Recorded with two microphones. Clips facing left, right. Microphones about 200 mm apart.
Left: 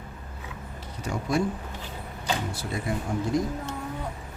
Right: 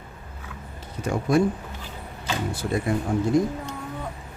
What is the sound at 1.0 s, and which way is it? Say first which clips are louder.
Speech: right 5 dB; 55° right (ahead or behind).